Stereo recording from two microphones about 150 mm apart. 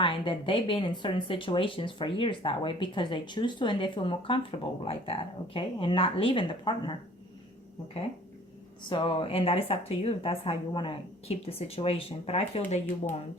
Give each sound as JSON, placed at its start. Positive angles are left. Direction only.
{"t": 0.0, "sound": "speech", "side_deg": 35}
{"t": 8.9, "sound": "speech", "side_deg": 35}